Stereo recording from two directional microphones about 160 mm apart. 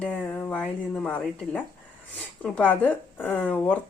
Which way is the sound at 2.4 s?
10° left (ahead or behind).